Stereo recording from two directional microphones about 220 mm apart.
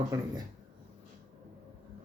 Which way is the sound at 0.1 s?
15° right (ahead or behind).